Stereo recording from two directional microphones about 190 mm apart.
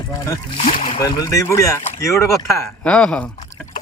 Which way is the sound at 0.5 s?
30° left (ahead or behind).